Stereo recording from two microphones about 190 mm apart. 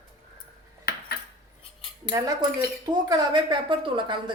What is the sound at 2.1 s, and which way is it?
A woman's voice, 20° right (ahead or behind).